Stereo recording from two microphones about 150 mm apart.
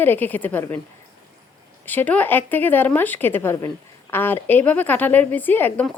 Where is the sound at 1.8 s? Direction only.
10° left (ahead or behind).